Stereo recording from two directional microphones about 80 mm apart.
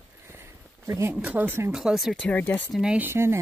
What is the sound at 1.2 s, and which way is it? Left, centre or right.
Speech, right.